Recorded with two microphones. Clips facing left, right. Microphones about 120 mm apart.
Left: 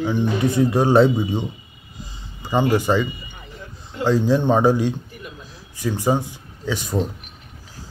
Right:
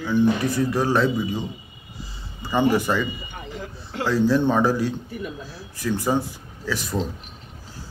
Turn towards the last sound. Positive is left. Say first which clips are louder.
# left 2 dB
turn(degrees=15)  # may be behind; listen again after turning